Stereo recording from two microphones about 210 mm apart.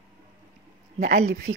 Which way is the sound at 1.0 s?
35° right (ahead or behind).